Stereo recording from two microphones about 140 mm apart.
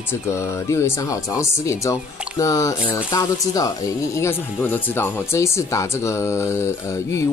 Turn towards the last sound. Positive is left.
turn(degrees=20)  # may be behind; listen again after turning